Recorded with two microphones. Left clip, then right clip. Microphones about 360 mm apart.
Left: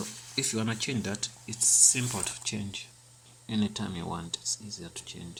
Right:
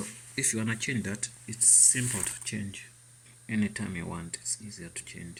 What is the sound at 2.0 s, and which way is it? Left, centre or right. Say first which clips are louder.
Speech: left 1 dB; centre.